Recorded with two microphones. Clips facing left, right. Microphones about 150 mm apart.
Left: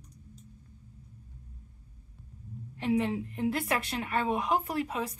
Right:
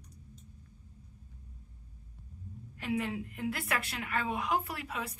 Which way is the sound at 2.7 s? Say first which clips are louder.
Left 6 dB; 30° left (ahead or behind).